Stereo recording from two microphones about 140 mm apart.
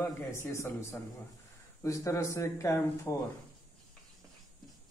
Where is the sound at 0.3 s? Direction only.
20° left (ahead or behind).